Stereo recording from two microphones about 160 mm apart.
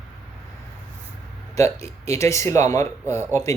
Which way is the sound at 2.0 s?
20° left (ahead or behind).